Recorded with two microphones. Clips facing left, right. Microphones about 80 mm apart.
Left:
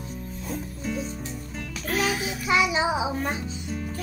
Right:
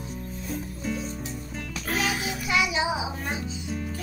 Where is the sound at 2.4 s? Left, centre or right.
Left.